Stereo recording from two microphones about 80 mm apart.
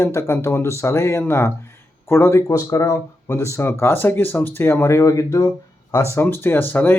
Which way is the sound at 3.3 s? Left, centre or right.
Left.